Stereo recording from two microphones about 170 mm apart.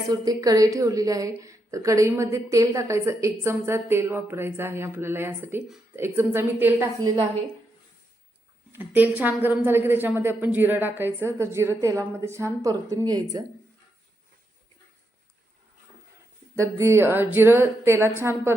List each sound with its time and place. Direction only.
0.1 s a woman's voice: 20° right (ahead or behind)
8.7 s a woman's voice: 10° right (ahead or behind)
16.6 s a woman's voice: 15° right (ahead or behind)